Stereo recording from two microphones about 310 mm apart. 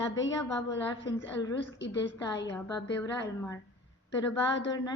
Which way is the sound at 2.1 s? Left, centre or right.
Centre.